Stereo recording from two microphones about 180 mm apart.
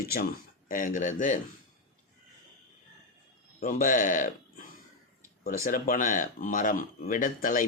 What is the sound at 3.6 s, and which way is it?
Speech, 50° left (ahead or behind).